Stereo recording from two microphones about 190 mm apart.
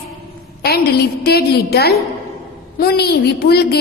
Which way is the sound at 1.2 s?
55° left (ahead or behind).